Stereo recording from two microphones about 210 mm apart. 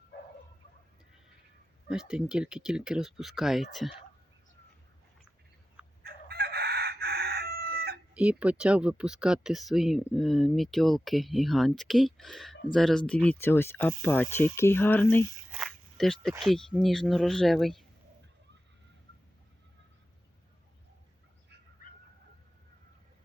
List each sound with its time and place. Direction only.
1.9 s speech: 5° right (ahead or behind)
6.0 s chicken: 50° right (ahead or behind)
8.1 s speech: 5° right (ahead or behind)
15.5 s a sound: centre (ahead or behind)
16.4 s speech: centre (ahead or behind)